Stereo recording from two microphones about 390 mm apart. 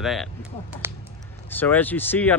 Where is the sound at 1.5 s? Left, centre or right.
Centre.